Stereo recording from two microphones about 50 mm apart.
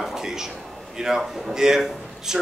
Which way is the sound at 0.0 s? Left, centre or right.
Centre.